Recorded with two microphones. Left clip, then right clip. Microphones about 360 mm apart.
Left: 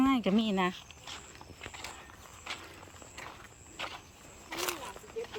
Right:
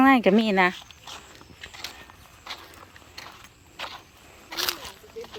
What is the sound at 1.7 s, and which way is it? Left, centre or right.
Clip-clop, centre.